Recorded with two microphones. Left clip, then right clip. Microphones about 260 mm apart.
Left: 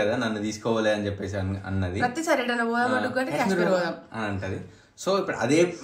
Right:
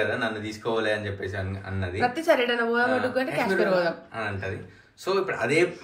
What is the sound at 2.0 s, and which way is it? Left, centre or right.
Speech, centre.